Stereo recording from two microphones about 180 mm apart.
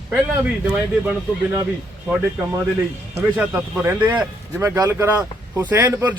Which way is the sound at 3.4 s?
5° right (ahead or behind).